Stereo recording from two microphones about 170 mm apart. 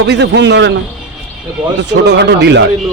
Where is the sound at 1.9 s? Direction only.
90° right.